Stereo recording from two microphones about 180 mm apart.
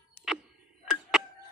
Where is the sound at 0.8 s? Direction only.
Centre (ahead or behind).